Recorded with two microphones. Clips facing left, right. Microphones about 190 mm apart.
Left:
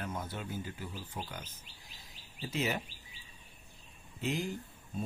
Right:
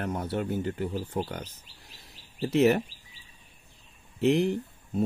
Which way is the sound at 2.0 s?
70° right (ahead or behind).